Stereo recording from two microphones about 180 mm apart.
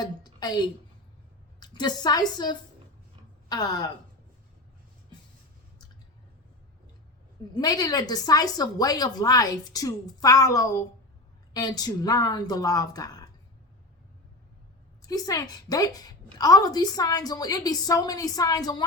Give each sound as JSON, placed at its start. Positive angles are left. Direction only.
{"t": 0.0, "sound": "a woman's voice", "side_deg": 25}
{"t": 7.5, "sound": "a woman's voice", "side_deg": 20}
{"t": 15.0, "sound": "a woman's voice", "side_deg": 20}